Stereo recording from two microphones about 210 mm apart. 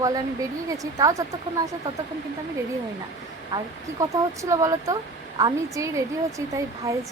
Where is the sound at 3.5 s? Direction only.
15° right (ahead or behind).